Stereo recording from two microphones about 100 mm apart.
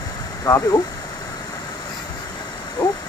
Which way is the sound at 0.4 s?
35° left (ahead or behind).